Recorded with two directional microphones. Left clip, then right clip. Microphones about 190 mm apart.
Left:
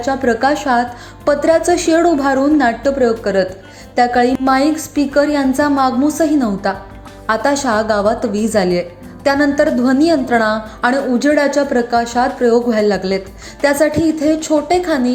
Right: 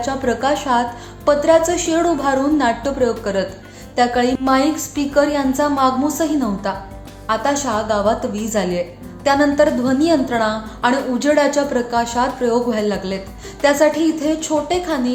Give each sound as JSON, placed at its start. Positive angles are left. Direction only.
{"t": 0.0, "sound": "a woman's voice", "side_deg": 20}